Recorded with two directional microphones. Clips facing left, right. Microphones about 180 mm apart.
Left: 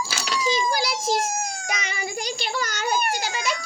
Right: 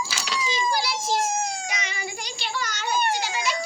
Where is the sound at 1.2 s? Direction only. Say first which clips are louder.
Right 1 dB; 25° right (ahead or behind).